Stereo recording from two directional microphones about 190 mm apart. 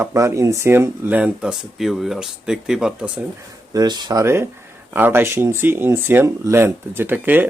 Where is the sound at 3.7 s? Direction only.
20° right (ahead or behind).